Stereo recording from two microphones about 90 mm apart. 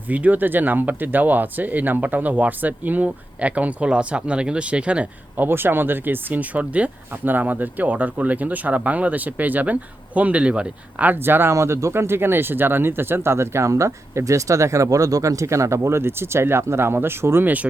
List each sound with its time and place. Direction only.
0.1 s speech: 20° right (ahead or behind)
5.5 s speech: 25° right (ahead or behind)